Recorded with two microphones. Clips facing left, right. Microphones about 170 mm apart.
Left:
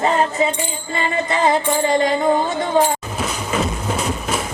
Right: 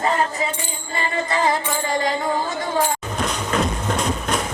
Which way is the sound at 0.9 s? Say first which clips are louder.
Left 2 dB; 20° left (ahead or behind).